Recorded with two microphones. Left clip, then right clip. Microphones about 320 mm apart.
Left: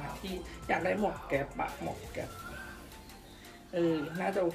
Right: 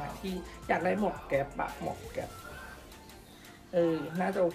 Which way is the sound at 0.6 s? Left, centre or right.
Centre.